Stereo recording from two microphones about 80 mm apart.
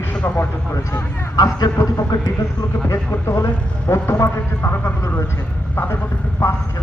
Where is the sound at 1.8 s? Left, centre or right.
Left.